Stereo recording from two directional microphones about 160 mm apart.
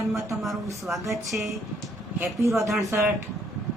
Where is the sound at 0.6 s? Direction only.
20° right (ahead or behind).